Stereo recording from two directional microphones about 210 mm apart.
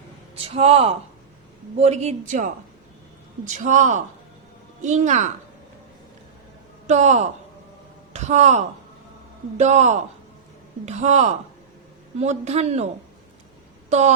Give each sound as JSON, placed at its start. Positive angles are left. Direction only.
{"t": 0.4, "sound": "speech", "side_deg": -30}
{"t": 6.8, "sound": "speech", "side_deg": -35}